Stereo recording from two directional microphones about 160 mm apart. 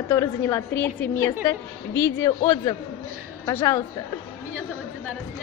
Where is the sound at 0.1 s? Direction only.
20° left (ahead or behind).